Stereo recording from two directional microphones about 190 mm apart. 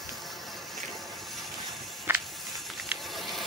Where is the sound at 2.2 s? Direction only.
Centre (ahead or behind).